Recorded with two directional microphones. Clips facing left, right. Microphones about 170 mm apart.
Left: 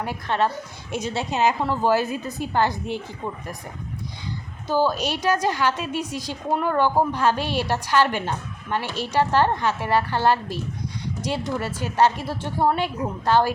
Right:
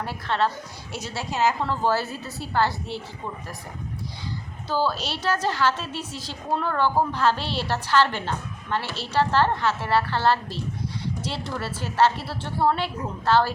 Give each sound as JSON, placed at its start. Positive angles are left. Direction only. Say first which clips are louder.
{"t": 0.0, "sound": "a woman's voice", "louder": "left 2 dB", "side_deg": 15}
{"t": 4.7, "sound": "a woman's voice", "louder": "left 4 dB", "side_deg": 15}